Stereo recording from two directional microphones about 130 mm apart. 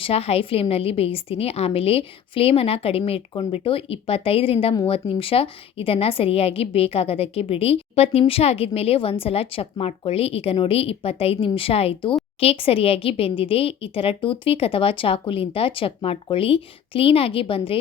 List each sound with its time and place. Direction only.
0.0 s speech: 50° left (ahead or behind)